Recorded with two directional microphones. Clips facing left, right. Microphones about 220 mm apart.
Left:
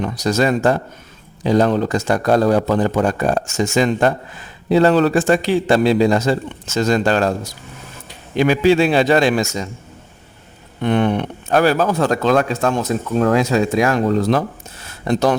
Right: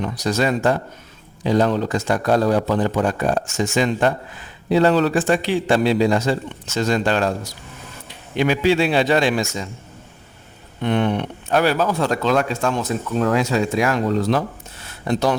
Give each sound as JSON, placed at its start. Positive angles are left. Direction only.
{"t": 0.0, "sound": "speech", "side_deg": 45}
{"t": 8.4, "sound": "speech", "side_deg": 45}
{"t": 10.8, "sound": "speech", "side_deg": 50}